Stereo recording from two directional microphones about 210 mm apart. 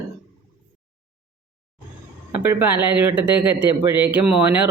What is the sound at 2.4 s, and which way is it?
A man's voice, 10° right (ahead or behind).